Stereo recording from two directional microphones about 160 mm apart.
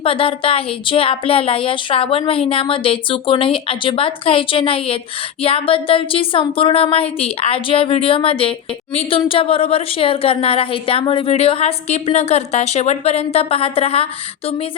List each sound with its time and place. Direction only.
0.0 s a woman's voice: 35° left (ahead or behind)